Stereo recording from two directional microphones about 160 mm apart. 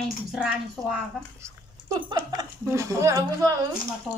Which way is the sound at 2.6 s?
20° right (ahead or behind).